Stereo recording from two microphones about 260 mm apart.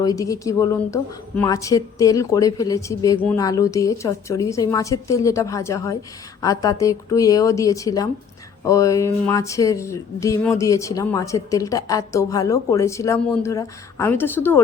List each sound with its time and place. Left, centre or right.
0.0 s speech: centre